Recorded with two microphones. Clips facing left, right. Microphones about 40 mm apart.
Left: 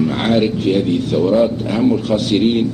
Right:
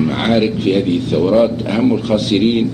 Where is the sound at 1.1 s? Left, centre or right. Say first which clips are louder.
Right 2 dB; right.